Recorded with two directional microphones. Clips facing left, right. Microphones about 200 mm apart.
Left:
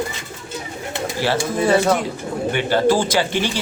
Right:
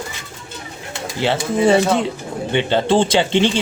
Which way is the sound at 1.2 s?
20° right (ahead or behind).